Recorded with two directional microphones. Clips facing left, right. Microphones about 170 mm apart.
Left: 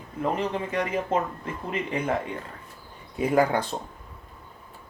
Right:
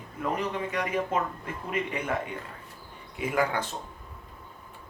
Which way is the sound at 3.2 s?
35° left (ahead or behind).